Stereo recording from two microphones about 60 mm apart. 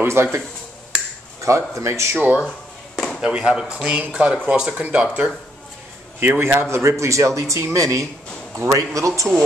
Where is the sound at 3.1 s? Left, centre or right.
Centre.